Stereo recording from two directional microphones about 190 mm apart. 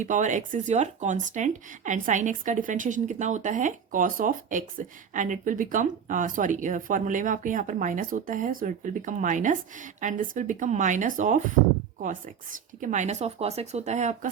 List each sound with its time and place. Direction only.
0.0 s speech: 40° right (ahead or behind)